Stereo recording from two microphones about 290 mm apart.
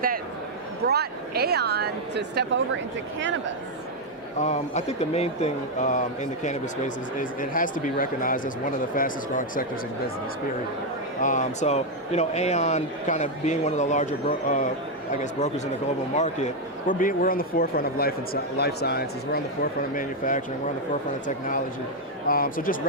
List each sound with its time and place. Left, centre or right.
0.9 s speech: right
4.4 s speech: left
11.2 s speech: left